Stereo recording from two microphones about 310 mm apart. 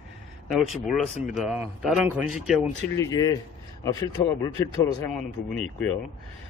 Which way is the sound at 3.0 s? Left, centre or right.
Centre.